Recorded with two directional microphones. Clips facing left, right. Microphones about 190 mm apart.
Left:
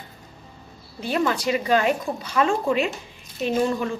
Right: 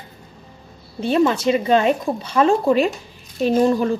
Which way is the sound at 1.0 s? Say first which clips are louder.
Right 6 dB; 25° right (ahead or behind).